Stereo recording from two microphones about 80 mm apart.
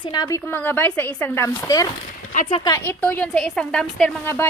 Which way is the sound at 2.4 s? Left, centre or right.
Left.